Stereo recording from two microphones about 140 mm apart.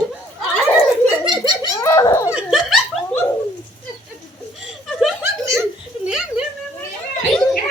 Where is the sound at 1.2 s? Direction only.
30° right (ahead or behind).